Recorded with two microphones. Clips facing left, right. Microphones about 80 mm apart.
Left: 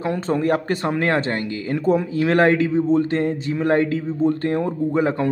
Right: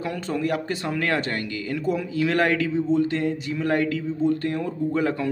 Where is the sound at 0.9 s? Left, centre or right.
Left.